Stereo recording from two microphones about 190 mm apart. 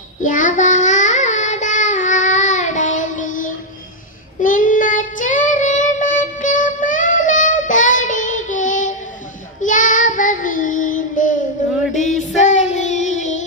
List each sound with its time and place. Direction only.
0.2 s child singing: 40° left (ahead or behind)
11.6 s a sound: 40° left (ahead or behind)
12.5 s child singing: 40° left (ahead or behind)